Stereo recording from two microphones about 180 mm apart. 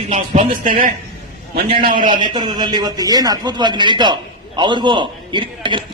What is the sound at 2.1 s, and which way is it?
A man's voice, 25° right (ahead or behind).